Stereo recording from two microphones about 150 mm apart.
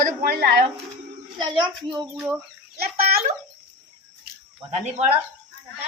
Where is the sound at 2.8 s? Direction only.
90° right.